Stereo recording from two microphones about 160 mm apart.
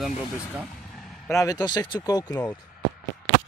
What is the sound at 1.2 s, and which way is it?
Speech, 20° left (ahead or behind).